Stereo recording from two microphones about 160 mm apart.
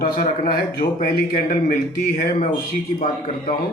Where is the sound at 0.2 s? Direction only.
70° left (ahead or behind).